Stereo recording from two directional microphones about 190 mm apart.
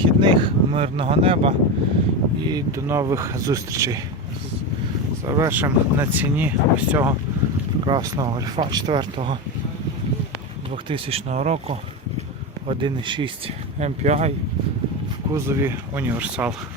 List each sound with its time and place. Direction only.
0.0 s a sound: 25° right (ahead or behind)
2.5 s speech: 15° right (ahead or behind)
5.2 s speech: 15° right (ahead or behind)
7.9 s speech: 25° right (ahead or behind)
10.8 s speech: 25° right (ahead or behind)
12.6 s speech: 25° right (ahead or behind)
13.7 s speech: 35° right (ahead or behind)
15.3 s speech: 15° right (ahead or behind)